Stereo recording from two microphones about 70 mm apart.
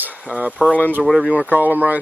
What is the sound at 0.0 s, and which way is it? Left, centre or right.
Speech, right.